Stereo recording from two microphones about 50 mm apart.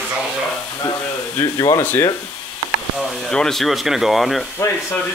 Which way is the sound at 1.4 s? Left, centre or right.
Left.